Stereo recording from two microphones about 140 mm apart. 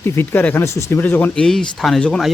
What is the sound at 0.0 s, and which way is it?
Speech, 15° left (ahead or behind).